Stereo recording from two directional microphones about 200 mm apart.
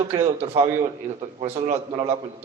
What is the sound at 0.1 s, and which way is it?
Speech, 30° right (ahead or behind).